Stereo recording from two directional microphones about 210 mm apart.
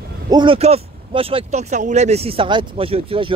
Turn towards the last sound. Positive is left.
turn(degrees=-25)  # may be behind; listen again after turning